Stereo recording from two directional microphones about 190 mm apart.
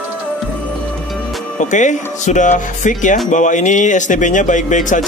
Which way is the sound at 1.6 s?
40° left (ahead or behind).